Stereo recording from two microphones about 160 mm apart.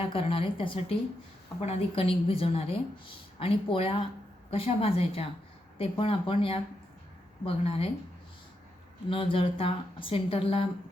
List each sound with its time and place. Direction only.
0.0 s speech: 35° left (ahead or behind)
9.0 s speech: 35° left (ahead or behind)